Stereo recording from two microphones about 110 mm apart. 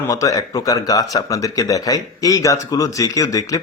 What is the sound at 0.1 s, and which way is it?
Speech, 30° left (ahead or behind).